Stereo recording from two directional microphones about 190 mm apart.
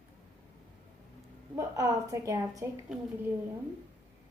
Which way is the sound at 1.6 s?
15° right (ahead or behind).